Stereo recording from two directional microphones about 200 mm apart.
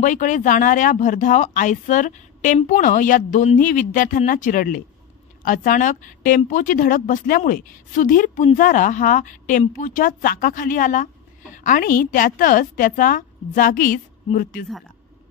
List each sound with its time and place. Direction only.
0.0 s a woman's voice: 40° left (ahead or behind)